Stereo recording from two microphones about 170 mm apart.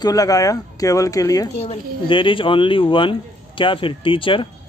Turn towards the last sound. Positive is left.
turn(degrees=30)  # may be behind; listen again after turning